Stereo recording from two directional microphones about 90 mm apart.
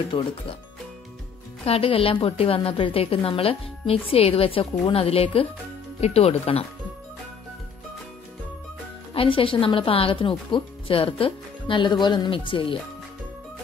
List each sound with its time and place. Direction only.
0.1 s speech: 70° left (ahead or behind)
1.7 s a woman's voice: 90° left
9.1 s speech: 85° left